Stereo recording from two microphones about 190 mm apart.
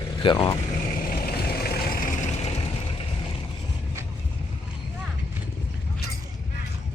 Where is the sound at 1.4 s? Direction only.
55° left (ahead or behind); by 2.6 s 35° left (ahead or behind).